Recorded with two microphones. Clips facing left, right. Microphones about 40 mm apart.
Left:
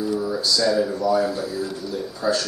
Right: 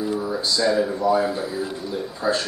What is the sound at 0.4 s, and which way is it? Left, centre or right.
A man's voice, right.